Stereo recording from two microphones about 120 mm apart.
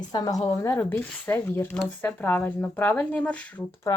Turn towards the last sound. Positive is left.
turn(degrees=30)  # may be behind; listen again after turning